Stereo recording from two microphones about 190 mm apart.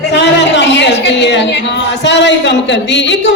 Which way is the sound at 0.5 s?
70° left (ahead or behind).